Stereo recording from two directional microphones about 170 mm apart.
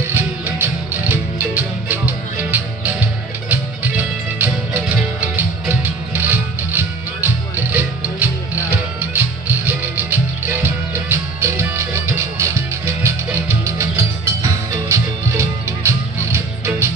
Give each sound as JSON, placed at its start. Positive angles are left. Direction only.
{"t": 0.0, "sound": "music", "side_deg": -15}